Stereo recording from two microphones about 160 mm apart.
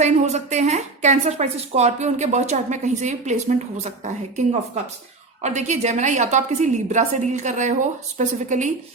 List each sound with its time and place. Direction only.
0.0 s a woman's voice: 45° right (ahead or behind)